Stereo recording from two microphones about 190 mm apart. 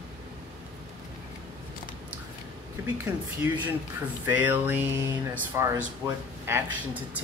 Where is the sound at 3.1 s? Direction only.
10° right (ahead or behind).